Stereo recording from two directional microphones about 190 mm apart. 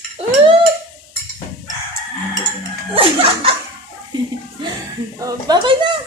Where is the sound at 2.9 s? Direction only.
30° right (ahead or behind).